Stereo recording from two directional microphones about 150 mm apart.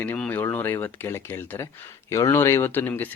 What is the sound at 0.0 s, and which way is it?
Speech, 10° left (ahead or behind).